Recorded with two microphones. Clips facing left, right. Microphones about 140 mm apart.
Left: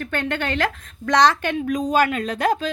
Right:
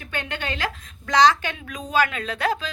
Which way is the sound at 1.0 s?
50° left (ahead or behind).